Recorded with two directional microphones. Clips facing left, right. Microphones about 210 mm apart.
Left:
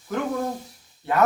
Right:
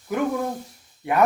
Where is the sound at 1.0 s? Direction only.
15° right (ahead or behind).